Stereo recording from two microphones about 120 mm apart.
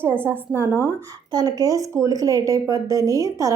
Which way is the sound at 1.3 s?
35° right (ahead or behind).